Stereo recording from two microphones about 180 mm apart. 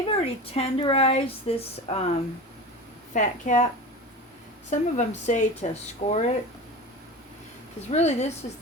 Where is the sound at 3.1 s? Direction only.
45° left (ahead or behind).